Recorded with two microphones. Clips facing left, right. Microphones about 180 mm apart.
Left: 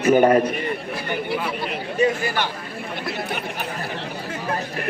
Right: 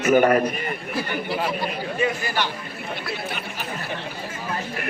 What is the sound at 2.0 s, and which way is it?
Chatter, 50° left (ahead or behind).